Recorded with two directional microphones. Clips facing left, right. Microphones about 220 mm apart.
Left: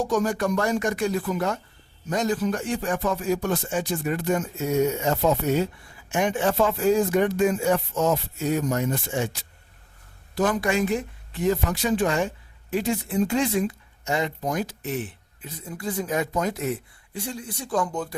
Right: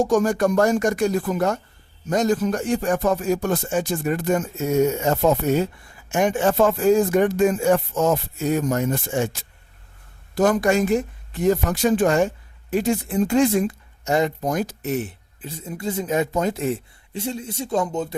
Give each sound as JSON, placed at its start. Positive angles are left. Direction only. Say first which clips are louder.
{"t": 0.0, "sound": "speech", "louder": "right 5 dB", "side_deg": -45}
{"t": 15.4, "sound": "speech", "louder": "right 4 dB", "side_deg": -25}